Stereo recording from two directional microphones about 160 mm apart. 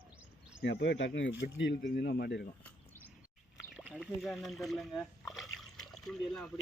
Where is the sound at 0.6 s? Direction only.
90° left.